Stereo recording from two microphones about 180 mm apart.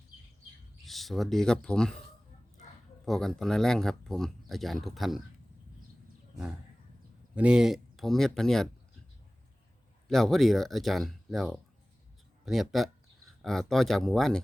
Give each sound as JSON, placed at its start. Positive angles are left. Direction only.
{"t": 0.9, "sound": "speech", "side_deg": 0}
{"t": 3.1, "sound": "speech", "side_deg": 0}
{"t": 7.3, "sound": "speech", "side_deg": -5}
{"t": 10.1, "sound": "speech", "side_deg": 0}